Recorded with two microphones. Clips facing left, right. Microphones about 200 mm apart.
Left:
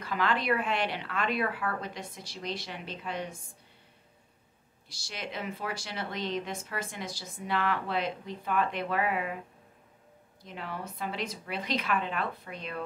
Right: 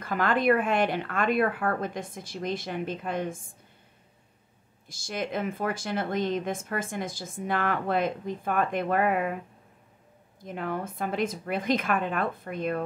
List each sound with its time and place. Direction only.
0.0 s speech: 50° right (ahead or behind)
4.8 s speech: 50° right (ahead or behind)
10.4 s speech: 50° right (ahead or behind)